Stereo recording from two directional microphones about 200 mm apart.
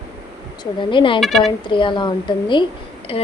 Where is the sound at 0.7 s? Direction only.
25° left (ahead or behind).